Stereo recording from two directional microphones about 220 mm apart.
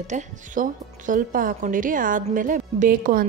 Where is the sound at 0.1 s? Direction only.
35° right (ahead or behind).